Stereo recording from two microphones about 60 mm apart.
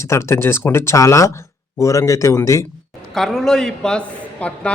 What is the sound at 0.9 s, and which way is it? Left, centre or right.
Speech, left.